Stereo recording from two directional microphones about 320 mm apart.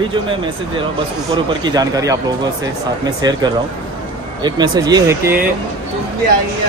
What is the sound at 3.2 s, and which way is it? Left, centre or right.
Speech, centre.